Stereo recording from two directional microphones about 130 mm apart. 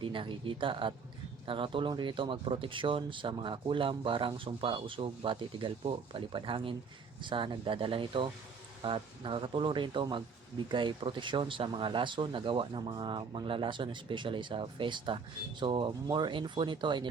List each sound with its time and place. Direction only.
0.0 s speech: 40° right (ahead or behind)